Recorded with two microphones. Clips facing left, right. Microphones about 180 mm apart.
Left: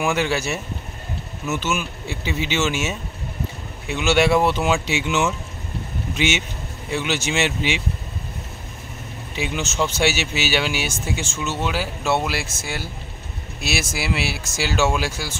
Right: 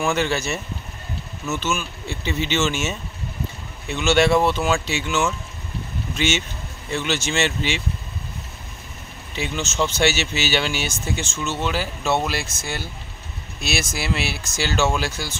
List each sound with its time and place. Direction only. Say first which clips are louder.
0.0 s speech: even; 10° left (ahead or behind)
9.3 s speech: left 1 dB; 10° left (ahead or behind)